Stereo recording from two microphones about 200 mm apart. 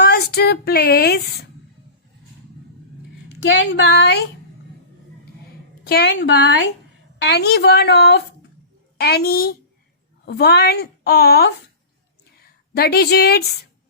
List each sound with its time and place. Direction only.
0.0 s speech: 50° left (ahead or behind)
3.4 s a woman's voice: 60° left (ahead or behind)
5.8 s a woman's voice: 55° left (ahead or behind)